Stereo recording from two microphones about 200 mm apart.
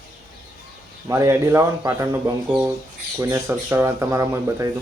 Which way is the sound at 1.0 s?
15° right (ahead or behind).